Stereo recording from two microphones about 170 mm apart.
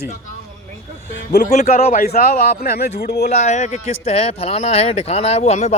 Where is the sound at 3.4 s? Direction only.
45° left (ahead or behind).